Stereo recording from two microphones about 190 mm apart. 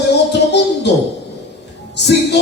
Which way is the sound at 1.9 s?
60° left (ahead or behind).